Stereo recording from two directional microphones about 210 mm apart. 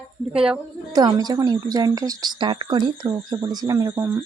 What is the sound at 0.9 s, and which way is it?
A woman's voice, 20° right (ahead or behind).